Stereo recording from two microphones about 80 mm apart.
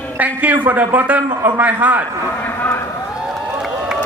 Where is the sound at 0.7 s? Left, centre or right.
Right.